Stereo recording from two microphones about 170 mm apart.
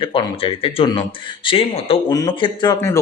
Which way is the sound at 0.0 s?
30° left (ahead or behind).